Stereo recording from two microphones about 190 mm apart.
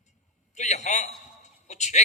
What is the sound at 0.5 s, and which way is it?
Speech, 40° left (ahead or behind).